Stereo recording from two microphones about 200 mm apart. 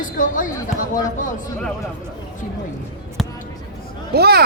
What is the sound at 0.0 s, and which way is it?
Speech, 40° left (ahead or behind).